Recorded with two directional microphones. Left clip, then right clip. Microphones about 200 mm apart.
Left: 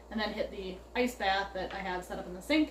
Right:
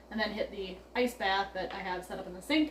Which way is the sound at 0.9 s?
5° right (ahead or behind).